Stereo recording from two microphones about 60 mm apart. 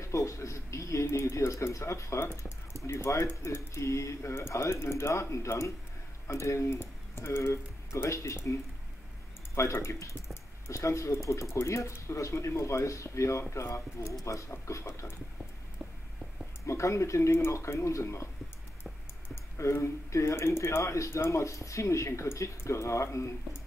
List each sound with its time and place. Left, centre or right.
0.0 s speech: left
1.0 s speech: left
1.3 s speech: left
2.1 s speech: left
9.6 s speech: left
16.6 s speech: left
19.6 s speech: left